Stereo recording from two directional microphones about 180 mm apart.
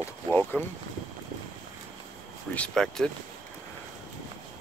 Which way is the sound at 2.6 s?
5° left (ahead or behind).